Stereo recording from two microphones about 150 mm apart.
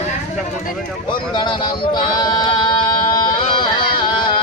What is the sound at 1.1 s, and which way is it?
Speech, 30° left (ahead or behind).